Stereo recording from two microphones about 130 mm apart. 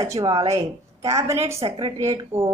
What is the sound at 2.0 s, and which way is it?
Speech, 25° right (ahead or behind).